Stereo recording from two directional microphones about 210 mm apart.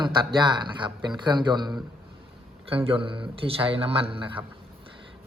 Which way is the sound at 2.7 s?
25° right (ahead or behind).